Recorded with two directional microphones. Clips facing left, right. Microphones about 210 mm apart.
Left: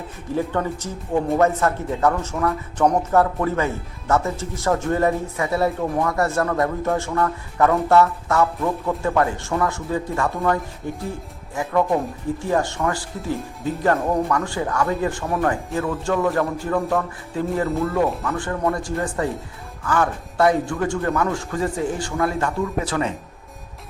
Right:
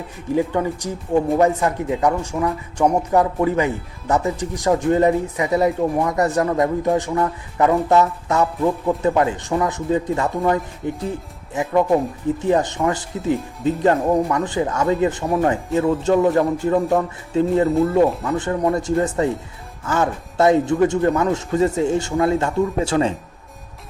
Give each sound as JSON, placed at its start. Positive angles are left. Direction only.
{"t": 0.3, "sound": "a man's voice", "side_deg": -15}